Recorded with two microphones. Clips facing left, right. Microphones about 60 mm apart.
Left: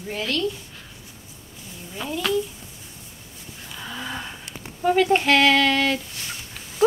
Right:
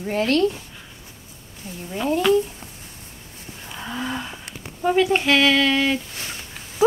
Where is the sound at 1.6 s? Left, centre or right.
Right.